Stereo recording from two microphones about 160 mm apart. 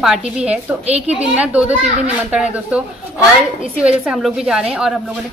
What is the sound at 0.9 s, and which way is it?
Speech, 40° right (ahead or behind).